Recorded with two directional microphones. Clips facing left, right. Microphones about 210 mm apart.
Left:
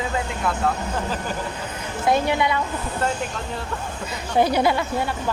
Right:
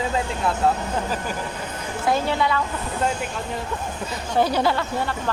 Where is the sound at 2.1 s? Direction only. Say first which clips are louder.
Left 1 dB; 15° left (ahead or behind).